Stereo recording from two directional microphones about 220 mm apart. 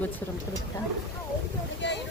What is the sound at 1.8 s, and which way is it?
Boat, 55° left (ahead or behind).